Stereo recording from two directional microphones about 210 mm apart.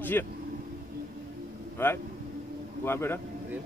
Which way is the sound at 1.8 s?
10° left (ahead or behind).